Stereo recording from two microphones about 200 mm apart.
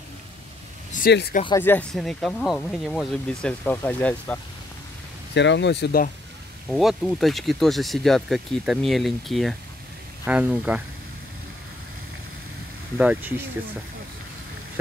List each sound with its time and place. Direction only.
0.9 s speech: 50° left (ahead or behind)
1.6 s speech: 10° left (ahead or behind)
5.3 s speech: 60° left (ahead or behind)
6.7 s speech: centre (ahead or behind)
12.9 s speech: 10° right (ahead or behind)